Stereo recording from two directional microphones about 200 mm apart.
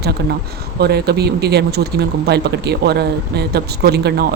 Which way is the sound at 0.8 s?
55° right (ahead or behind).